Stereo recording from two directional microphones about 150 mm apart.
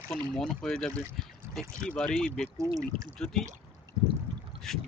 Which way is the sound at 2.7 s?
35° right (ahead or behind).